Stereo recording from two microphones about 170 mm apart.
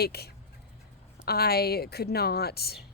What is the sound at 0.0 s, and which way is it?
A woman's voice, 70° left (ahead or behind).